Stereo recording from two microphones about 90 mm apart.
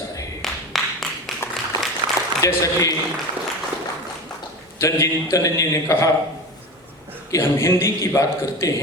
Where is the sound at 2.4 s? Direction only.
40° left (ahead or behind).